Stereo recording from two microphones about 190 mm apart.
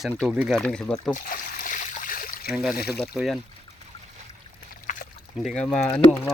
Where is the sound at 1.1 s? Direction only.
45° left (ahead or behind).